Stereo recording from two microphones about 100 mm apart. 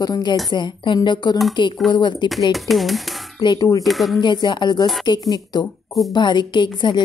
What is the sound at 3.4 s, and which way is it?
Speech, 50° left (ahead or behind).